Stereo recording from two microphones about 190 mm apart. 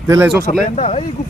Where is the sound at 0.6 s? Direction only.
35° left (ahead or behind).